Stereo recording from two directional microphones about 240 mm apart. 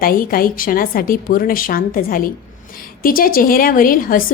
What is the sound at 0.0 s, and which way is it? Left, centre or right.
A woman's voice, left.